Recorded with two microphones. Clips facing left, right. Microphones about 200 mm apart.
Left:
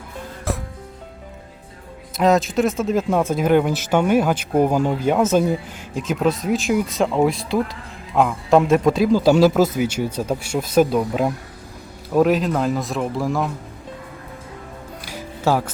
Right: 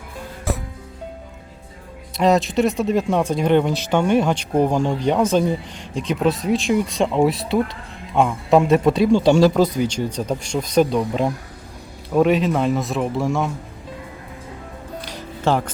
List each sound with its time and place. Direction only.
0.5 s music: centre (ahead or behind)
2.1 s speech: centre (ahead or behind)
15.0 s music: 5° left (ahead or behind)